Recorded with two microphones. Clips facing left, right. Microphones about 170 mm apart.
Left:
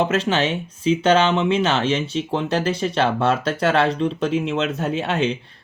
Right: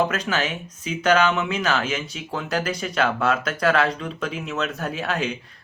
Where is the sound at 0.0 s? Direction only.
25° left (ahead or behind).